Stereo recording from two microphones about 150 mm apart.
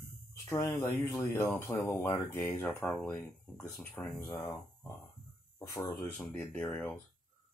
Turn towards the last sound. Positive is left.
turn(degrees=10)  # may be behind; listen again after turning